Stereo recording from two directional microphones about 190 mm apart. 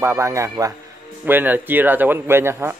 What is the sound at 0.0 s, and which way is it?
A man's voice, 15° right (ahead or behind).